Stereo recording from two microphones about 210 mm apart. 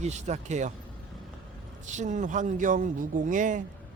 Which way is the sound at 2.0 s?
35° right (ahead or behind).